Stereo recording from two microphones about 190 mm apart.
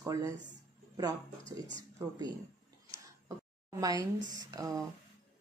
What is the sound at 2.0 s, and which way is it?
Speech, 15° right (ahead or behind).